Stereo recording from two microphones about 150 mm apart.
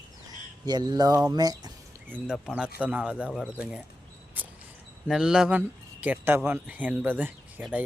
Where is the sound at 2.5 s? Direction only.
10° right (ahead or behind).